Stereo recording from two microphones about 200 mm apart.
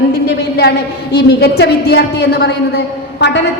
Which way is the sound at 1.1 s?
55° left (ahead or behind).